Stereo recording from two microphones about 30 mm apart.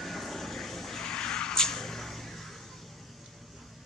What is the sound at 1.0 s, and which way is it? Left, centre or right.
Vehicle, left.